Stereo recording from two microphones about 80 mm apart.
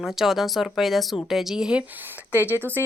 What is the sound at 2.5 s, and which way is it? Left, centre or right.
Speech, right.